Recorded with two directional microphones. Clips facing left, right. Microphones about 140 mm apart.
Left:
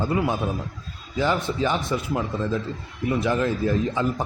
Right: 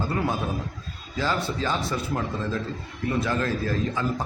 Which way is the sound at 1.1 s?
15° left (ahead or behind).